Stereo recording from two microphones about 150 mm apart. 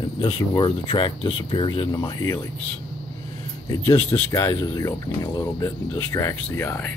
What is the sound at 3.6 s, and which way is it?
Speech, 20° left (ahead or behind).